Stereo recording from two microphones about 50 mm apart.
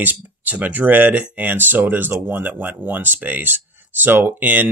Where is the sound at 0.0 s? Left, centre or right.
Right.